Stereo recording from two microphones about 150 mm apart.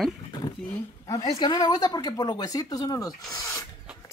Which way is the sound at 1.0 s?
25° left (ahead or behind).